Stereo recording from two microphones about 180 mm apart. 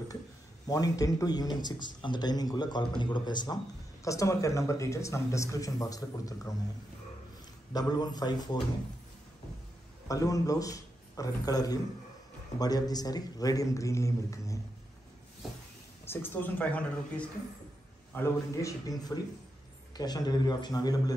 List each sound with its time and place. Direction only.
0.7 s a man's voice: 20° left (ahead or behind)
7.7 s a man's voice: 20° left (ahead or behind)
10.0 s a man's voice: 20° left (ahead or behind)
16.1 s a man's voice: 10° left (ahead or behind)